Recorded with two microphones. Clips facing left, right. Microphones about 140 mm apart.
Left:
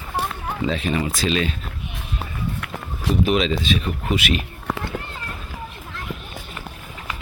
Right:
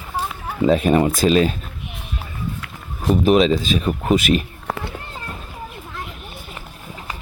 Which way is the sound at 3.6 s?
40° right (ahead or behind).